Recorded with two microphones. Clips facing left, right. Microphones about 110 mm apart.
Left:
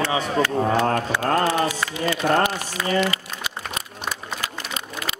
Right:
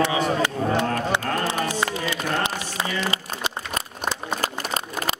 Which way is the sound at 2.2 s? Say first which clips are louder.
Left 9 dB; 50° left (ahead or behind).